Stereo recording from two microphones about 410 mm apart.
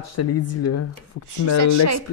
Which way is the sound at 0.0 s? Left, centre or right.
Left.